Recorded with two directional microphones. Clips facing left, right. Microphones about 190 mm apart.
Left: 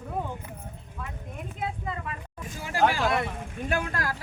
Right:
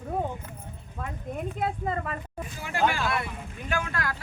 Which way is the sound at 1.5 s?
50° right (ahead or behind).